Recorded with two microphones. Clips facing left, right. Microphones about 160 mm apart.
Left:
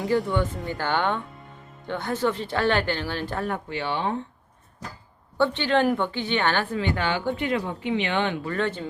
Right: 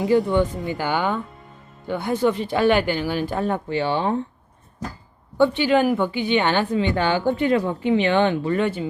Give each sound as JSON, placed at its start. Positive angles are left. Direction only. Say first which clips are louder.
{"t": 0.3, "sound": "speech", "louder": "right 5 dB", "side_deg": -20}
{"t": 0.9, "sound": "speech", "louder": "right 1 dB", "side_deg": -5}
{"t": 3.4, "sound": "speech", "louder": "right 6 dB", "side_deg": -30}
{"t": 5.4, "sound": "speech", "louder": "right 4 dB", "side_deg": -10}
{"t": 7.0, "sound": "speech", "louder": "right 6 dB", "side_deg": -35}
{"t": 8.4, "sound": "speech", "louder": "right 5 dB", "side_deg": -15}